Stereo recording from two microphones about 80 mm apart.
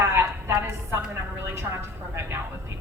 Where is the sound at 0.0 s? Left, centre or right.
Right.